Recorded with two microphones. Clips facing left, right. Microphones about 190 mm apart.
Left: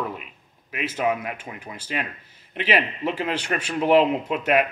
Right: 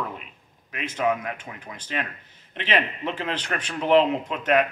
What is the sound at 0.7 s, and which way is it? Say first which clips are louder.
A man's voice: left 1 dB; 5° left (ahead or behind).